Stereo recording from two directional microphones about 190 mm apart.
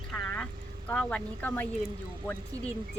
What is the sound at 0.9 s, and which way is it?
Speech, 5° left (ahead or behind).